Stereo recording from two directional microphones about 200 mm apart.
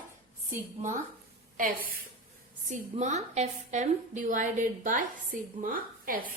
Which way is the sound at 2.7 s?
35° right (ahead or behind).